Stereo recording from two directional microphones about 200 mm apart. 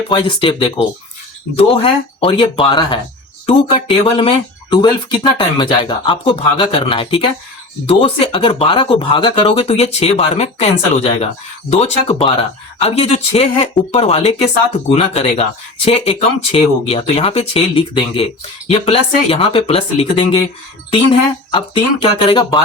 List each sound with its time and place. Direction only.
0.1 s speech: 25° left (ahead or behind)